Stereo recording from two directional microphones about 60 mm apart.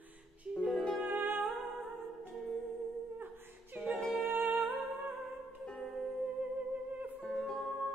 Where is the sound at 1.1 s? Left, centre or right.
Right.